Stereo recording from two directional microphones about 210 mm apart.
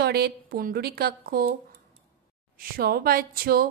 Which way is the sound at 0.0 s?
50° right (ahead or behind).